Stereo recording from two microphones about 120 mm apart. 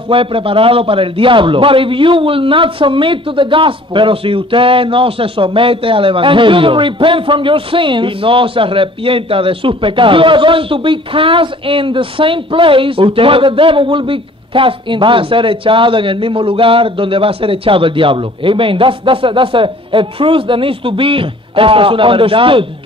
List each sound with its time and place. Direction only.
0.1 s a man's voice: 50° right (ahead or behind)